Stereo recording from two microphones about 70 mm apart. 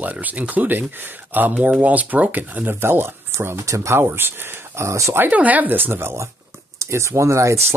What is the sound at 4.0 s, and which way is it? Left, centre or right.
Speech, right.